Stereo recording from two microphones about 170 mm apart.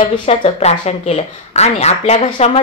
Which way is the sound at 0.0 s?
35° left (ahead or behind).